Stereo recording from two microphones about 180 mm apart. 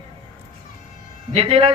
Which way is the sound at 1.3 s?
30° right (ahead or behind).